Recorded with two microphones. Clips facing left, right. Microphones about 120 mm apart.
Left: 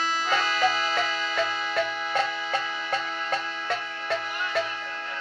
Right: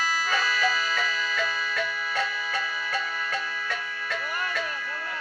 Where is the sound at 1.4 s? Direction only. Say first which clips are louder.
Left 5 dB; 25° left (ahead or behind).